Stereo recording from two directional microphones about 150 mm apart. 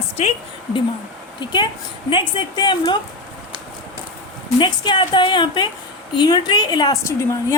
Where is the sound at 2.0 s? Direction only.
35° left (ahead or behind).